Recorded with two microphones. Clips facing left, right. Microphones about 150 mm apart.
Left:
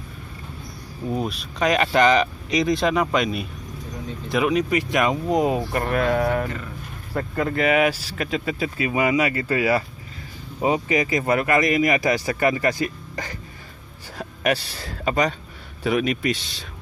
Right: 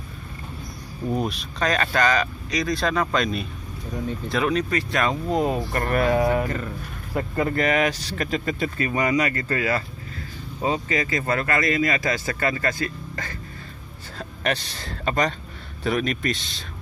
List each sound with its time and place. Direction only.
1.0 s speech: centre (ahead or behind)
1.6 s speech: 15° left (ahead or behind)
5.9 s speech: 10° right (ahead or behind)
7.5 s speech: 10° left (ahead or behind)